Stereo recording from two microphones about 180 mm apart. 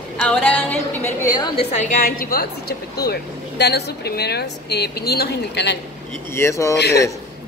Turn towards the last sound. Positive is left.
turn(degrees=65)  # may be behind; listen again after turning